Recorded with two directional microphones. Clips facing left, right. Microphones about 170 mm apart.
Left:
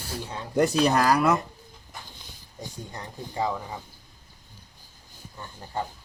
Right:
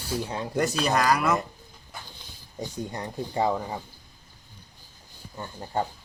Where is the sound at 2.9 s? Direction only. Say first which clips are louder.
Right 3 dB; 30° right (ahead or behind).